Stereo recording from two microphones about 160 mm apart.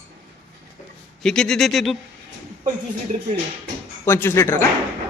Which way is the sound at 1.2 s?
5° left (ahead or behind).